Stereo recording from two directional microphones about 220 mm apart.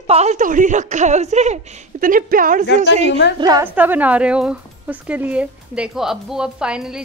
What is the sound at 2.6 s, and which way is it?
Speech, 55° left (ahead or behind).